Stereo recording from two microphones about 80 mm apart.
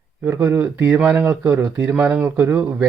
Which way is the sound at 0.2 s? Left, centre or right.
Right.